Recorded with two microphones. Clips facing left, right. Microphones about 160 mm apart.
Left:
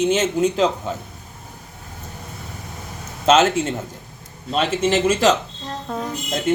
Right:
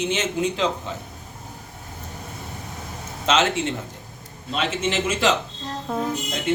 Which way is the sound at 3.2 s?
45° left (ahead or behind).